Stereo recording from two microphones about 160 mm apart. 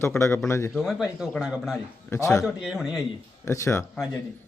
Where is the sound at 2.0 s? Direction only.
15° left (ahead or behind).